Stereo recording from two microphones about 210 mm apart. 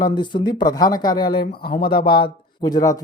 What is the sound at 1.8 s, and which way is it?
Speech, 20° left (ahead or behind).